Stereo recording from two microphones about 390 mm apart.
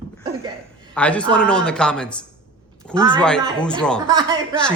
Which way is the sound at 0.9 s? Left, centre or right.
Centre.